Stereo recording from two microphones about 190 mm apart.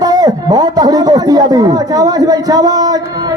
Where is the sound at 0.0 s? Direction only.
20° right (ahead or behind).